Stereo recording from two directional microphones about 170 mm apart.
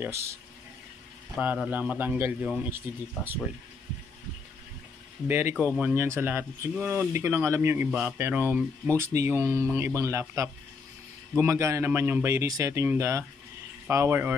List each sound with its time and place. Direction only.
0.0 s speech: 15° right (ahead or behind)
1.4 s speech: 10° right (ahead or behind)
5.3 s speech: 15° right (ahead or behind)